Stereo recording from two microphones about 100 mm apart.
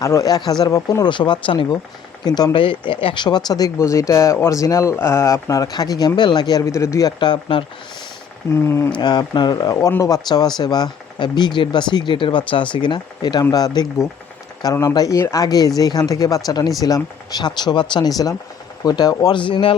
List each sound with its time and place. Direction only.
0.0 s speech: 30° left (ahead or behind)
1.0 s speech: 50° left (ahead or behind)
2.5 s speech: 55° left (ahead or behind)
3.2 s speech: 45° left (ahead or behind)
6.7 s speech: 30° left (ahead or behind)
7.2 s speech: 55° left (ahead or behind)
8.6 s speech: 25° left (ahead or behind)
9.0 s speech: 45° left (ahead or behind)
13.4 s speech: 35° left (ahead or behind); by 19.7 s 55° left (ahead or behind)